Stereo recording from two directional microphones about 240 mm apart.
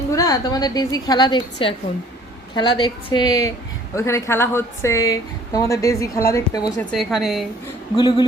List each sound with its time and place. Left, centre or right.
0.1 s a woman's voice: centre
6.9 s a woman's voice: centre
7.9 s a woman's voice: left